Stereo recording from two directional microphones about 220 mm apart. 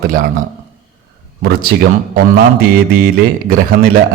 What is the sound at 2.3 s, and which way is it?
Speech, 40° right (ahead or behind).